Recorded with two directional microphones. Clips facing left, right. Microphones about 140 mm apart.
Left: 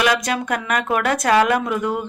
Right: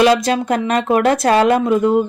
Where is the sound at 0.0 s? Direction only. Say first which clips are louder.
Right 7 dB; 30° right (ahead or behind).